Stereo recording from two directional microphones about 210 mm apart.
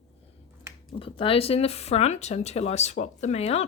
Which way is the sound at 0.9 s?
25° left (ahead or behind).